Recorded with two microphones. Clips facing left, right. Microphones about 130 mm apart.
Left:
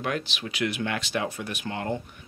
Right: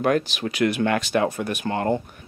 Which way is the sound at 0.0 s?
45° right (ahead or behind).